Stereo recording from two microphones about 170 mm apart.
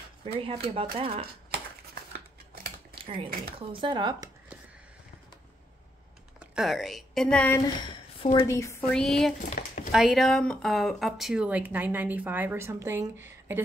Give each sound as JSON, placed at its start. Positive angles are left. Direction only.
{"t": 0.2, "sound": "speech", "side_deg": -35}
{"t": 2.9, "sound": "a sound", "side_deg": -30}
{"t": 3.5, "sound": "speech", "side_deg": -30}
{"t": 6.4, "sound": "a woman's voice", "side_deg": -5}
{"t": 7.6, "sound": "a sound", "side_deg": 30}
{"t": 8.5, "sound": "a woman's voice", "side_deg": 15}
{"t": 8.9, "sound": "speech", "side_deg": 5}
{"t": 9.4, "sound": "speech", "side_deg": 55}
{"t": 9.9, "sound": "speech", "side_deg": 0}